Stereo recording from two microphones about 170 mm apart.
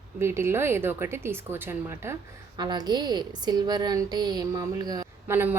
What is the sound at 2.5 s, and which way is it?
A woman's voice, 25° right (ahead or behind).